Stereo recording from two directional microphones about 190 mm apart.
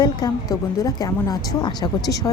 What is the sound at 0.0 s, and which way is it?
A woman's voice, 20° left (ahead or behind).